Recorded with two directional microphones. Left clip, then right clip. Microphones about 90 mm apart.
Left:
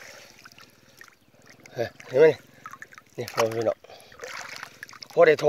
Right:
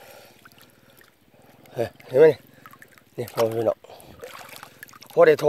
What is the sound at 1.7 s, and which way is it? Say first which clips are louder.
Speech: right 3 dB; 25° right (ahead or behind).